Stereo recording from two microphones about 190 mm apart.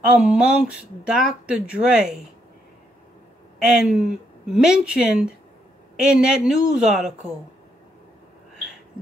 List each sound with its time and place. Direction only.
0.1 s speech: 5° right (ahead or behind)
3.6 s speech: 5° right (ahead or behind)